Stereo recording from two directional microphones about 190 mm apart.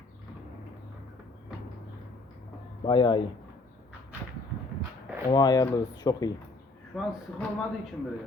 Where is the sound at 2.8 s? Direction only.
25° left (ahead or behind).